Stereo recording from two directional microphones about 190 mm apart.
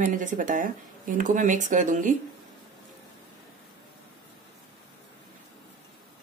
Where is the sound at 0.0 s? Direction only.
45° right (ahead or behind).